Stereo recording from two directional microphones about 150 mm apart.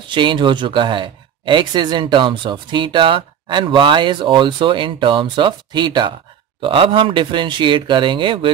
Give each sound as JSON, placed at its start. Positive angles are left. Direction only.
{"t": 0.1, "sound": "speech", "side_deg": -30}